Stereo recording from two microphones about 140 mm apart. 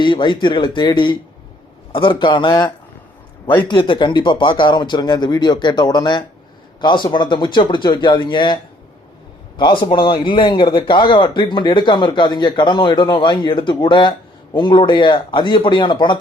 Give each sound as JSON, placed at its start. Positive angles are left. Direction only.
{"t": 0.0, "sound": "a man's voice", "side_deg": 35}
{"t": 3.4, "sound": "a man's voice", "side_deg": 15}
{"t": 3.7, "sound": "a man's voice", "side_deg": 35}
{"t": 9.6, "sound": "a man's voice", "side_deg": 35}